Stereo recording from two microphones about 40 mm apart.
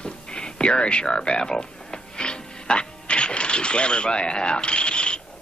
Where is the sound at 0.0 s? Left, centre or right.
Left.